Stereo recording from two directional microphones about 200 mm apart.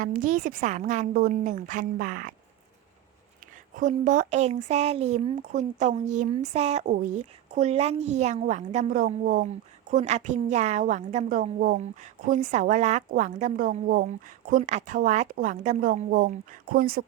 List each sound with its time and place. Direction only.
0.0 s speech: 40° right (ahead or behind)
3.8 s speech: 40° right (ahead or behind)